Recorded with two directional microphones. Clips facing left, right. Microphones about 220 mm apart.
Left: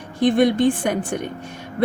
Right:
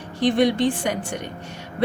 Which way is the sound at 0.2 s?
55° left (ahead or behind).